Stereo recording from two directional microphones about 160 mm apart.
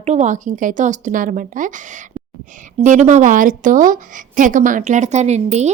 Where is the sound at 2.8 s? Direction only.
50° right (ahead or behind).